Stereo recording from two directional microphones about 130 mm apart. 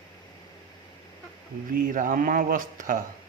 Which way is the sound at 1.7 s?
90° right.